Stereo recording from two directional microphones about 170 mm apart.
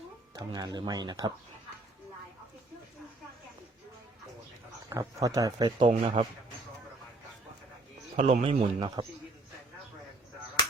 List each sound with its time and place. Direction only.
0.3 s speech: 25° right (ahead or behind)
4.9 s a man's voice: 20° right (ahead or behind)
8.1 s a man's voice: 40° right (ahead or behind)